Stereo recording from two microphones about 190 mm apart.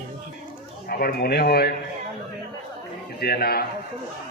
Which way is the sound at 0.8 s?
55° left (ahead or behind).